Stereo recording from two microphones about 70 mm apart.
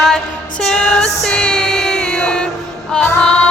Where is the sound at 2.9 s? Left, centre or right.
Centre.